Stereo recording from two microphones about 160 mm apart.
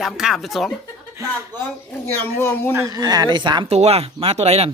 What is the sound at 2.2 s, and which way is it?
Speech, 15° left (ahead or behind).